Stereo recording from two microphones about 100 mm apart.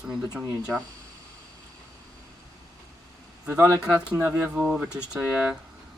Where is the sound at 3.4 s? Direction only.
20° right (ahead or behind).